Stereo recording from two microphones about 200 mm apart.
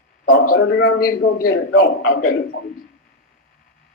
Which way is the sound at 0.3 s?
90° left.